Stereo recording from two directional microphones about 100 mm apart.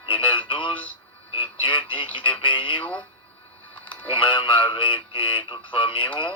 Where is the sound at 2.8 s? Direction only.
15° left (ahead or behind).